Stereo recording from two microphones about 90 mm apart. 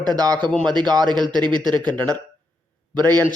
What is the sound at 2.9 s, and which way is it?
Speech, 45° right (ahead or behind).